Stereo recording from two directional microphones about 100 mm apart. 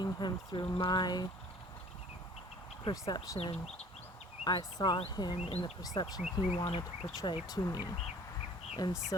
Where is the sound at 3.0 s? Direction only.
35° left (ahead or behind).